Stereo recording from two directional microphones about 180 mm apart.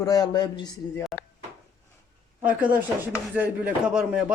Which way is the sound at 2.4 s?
10° right (ahead or behind).